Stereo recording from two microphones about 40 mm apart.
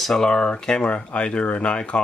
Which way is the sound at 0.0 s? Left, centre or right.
Centre.